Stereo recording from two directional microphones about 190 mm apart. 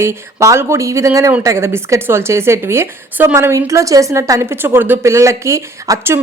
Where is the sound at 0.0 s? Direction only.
15° right (ahead or behind).